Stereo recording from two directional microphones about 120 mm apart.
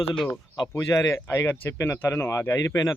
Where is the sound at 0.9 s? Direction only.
25° left (ahead or behind).